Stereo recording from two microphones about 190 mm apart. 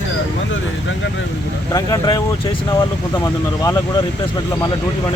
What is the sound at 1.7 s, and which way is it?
Speech, 20° left (ahead or behind).